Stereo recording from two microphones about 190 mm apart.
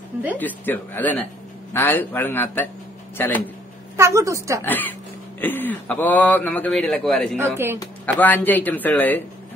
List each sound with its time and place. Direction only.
0.4 s a man's voice: 10° left (ahead or behind)
3.9 s a woman's voice: 15° right (ahead or behind)
4.6 s a man's voice: 10° left (ahead or behind)
7.3 s a woman's voice: 10° right (ahead or behind)
7.8 s a man's voice: 10° left (ahead or behind)